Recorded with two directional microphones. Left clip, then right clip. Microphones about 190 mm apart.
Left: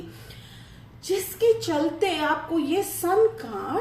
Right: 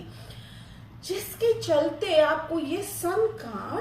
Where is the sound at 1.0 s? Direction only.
35° left (ahead or behind).